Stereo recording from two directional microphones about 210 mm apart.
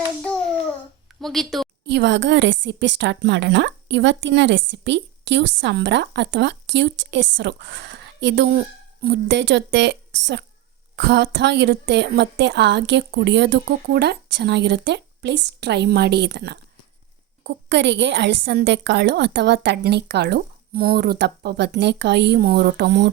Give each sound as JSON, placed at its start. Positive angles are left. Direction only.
{"t": 0.2, "sound": "a child's voice", "side_deg": 0}
{"t": 1.9, "sound": "a woman's voice", "side_deg": -55}